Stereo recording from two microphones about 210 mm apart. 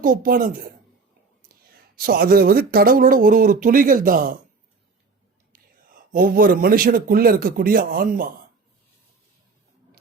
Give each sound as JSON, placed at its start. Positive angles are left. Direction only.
{"t": 0.0, "sound": "a woman's voice", "side_deg": -40}
{"t": 2.0, "sound": "speech", "side_deg": -45}
{"t": 5.5, "sound": "a man's voice", "side_deg": -45}